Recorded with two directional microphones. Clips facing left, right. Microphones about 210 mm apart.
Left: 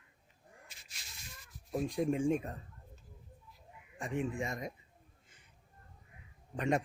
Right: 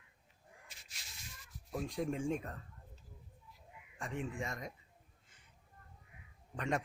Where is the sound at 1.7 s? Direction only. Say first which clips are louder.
Left 5 dB; 15° left (ahead or behind).